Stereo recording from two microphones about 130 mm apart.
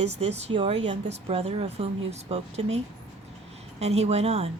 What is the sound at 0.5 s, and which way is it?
Speech, 40° right (ahead or behind).